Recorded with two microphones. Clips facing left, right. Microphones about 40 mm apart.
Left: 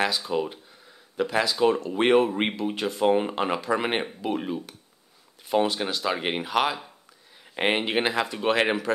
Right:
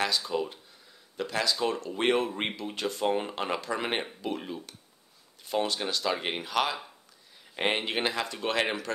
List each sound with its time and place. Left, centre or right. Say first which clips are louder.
0.0 s speech: left 4 dB; centre